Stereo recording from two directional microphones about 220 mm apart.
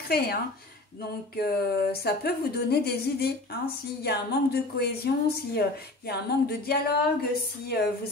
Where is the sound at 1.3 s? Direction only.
45° left (ahead or behind).